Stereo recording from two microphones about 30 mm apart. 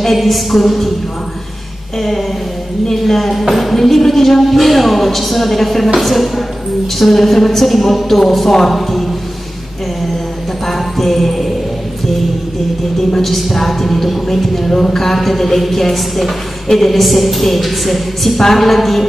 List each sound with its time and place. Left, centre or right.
0.0 s a woman's voice: centre
2.0 s a woman's voice: centre
10.7 s a sound: centre
13.1 s a woman's voice: centre
14.7 s a sound: centre
15.0 s a woman's voice: centre